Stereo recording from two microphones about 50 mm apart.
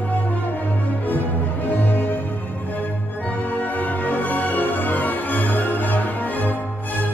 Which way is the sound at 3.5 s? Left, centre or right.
Left.